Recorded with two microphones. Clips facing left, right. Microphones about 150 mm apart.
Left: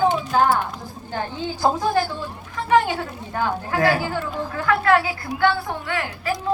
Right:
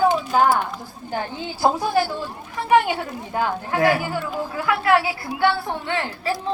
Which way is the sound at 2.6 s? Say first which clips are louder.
Right 2 dB; 10° right (ahead or behind).